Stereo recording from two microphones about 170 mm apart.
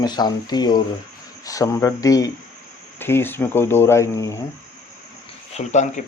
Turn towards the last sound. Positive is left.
turn(degrees=45)  # may be behind; listen again after turning